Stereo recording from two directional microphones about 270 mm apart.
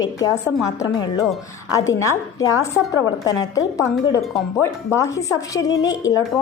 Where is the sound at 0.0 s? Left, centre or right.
Centre.